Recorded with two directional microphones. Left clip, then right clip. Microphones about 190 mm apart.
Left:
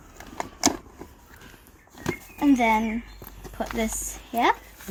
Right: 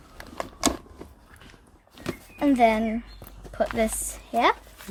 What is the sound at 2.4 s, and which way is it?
Speech, 45° right (ahead or behind).